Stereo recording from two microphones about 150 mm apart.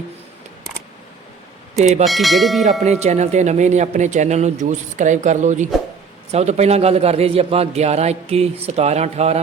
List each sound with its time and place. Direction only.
1.8 s speech: 50° right (ahead or behind)
2.0 s speech: centre (ahead or behind)
2.8 s speech: 45° right (ahead or behind)